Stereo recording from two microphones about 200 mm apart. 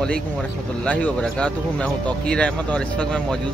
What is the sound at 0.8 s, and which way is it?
Speech, 5° left (ahead or behind).